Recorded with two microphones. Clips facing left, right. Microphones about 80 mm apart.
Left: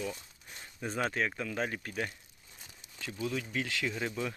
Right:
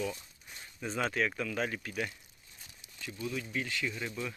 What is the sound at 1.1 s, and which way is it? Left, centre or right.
Speech, left.